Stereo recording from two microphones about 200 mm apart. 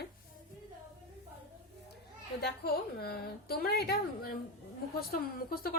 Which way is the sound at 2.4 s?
50° left (ahead or behind).